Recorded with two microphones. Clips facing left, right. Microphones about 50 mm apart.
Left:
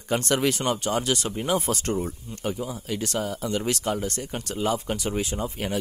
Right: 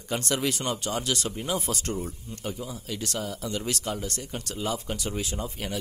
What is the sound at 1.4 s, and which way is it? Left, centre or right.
Speech, left.